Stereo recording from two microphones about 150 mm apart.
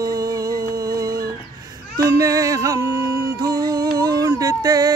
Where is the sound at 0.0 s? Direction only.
25° right (ahead or behind).